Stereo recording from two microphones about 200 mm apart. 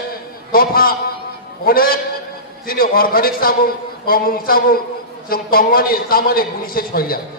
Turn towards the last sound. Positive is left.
turn(degrees=45)  # may be behind; listen again after turning